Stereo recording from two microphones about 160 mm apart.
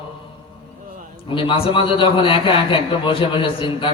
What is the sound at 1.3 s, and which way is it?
A man's voice, 35° left (ahead or behind).